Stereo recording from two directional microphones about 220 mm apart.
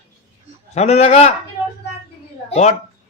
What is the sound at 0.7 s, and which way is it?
Speech, 30° left (ahead or behind).